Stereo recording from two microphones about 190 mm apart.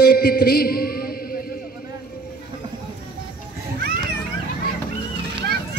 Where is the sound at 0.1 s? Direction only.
50° left (ahead or behind).